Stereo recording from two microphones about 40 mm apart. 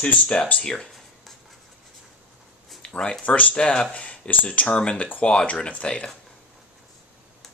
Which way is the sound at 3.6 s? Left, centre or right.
Left.